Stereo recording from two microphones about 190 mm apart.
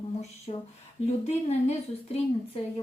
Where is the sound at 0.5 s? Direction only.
35° left (ahead or behind).